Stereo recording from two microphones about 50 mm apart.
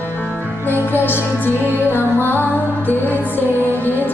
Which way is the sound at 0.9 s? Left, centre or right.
Left.